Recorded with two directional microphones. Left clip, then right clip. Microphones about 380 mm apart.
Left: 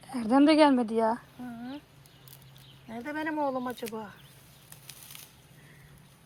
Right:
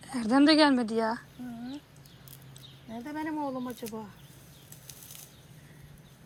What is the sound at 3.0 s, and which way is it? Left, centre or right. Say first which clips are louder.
Speech: left 4 dB; centre.